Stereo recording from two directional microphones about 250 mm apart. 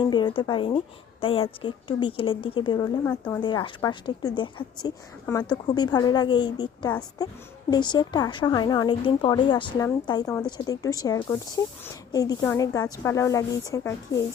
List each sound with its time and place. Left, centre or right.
0.0 s a woman's voice: centre
3.4 s a woman's voice: centre